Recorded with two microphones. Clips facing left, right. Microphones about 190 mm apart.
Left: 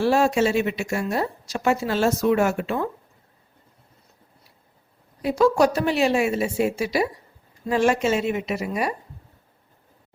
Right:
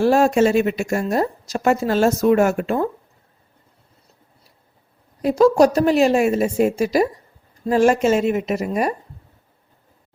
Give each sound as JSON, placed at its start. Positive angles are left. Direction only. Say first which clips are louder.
{"t": 0.0, "sound": "a woman's voice", "louder": "right 4 dB", "side_deg": -45}
{"t": 5.2, "sound": "a woman's voice", "louder": "right 5 dB", "side_deg": -40}